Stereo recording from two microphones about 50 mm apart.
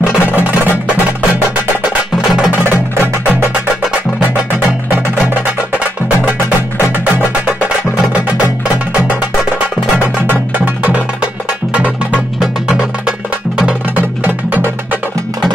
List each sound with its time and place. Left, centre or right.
2.6 s percussion: right
4.2 s music: right
9.9 s music: right
13.9 s music: right